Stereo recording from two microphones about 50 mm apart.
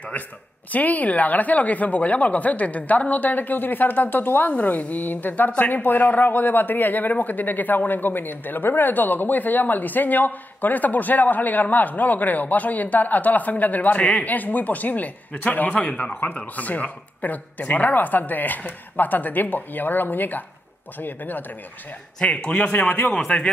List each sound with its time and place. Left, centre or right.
0.7 s speech: left
22.2 s speech: left
23.0 s speech: centre